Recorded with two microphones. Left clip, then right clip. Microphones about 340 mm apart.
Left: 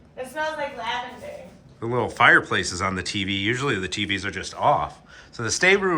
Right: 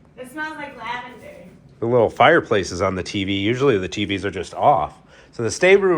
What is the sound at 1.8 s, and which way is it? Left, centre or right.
Speech, centre.